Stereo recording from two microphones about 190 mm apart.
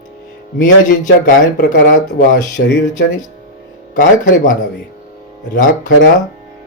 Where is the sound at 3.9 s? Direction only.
45° left (ahead or behind).